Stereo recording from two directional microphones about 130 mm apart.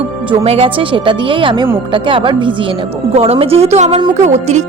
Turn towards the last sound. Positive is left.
turn(degrees=-60)  # may be behind; listen again after turning